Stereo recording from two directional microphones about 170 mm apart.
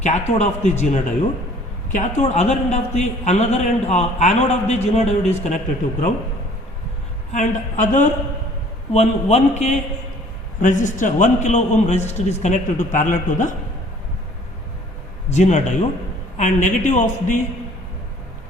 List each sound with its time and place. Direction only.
0.0 s a man's voice: 40° left (ahead or behind)
7.3 s a man's voice: 50° left (ahead or behind)
15.3 s a man's voice: 45° left (ahead or behind)